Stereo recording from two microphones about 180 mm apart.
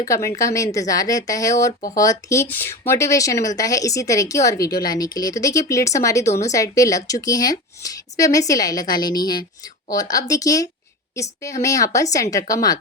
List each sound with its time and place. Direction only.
0.0 s a woman's voice: 15° left (ahead or behind)